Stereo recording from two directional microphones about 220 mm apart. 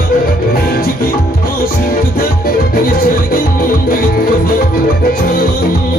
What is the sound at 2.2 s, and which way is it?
Music, 40° left (ahead or behind).